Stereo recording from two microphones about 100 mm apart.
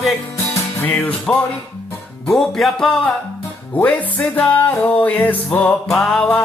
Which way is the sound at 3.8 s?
15° left (ahead or behind).